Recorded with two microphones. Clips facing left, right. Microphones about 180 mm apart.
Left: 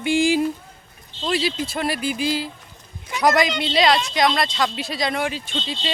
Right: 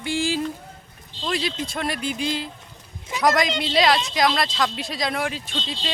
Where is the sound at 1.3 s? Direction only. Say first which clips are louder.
Left 3 dB; 5° left (ahead or behind).